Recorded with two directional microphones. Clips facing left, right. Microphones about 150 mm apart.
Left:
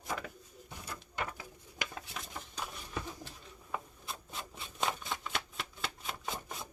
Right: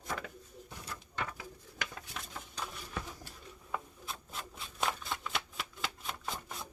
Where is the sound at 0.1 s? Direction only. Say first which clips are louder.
Left 1 dB; 10° left (ahead or behind).